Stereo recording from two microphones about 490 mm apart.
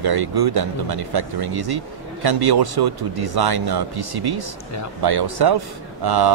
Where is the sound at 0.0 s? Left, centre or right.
Right.